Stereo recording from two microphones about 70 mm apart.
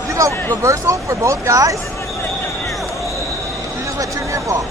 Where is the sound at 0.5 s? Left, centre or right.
Right.